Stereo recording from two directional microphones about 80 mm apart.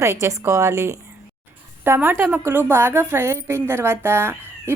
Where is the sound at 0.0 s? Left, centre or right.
Right.